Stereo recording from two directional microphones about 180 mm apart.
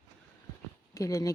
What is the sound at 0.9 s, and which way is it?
Speech, 15° left (ahead or behind).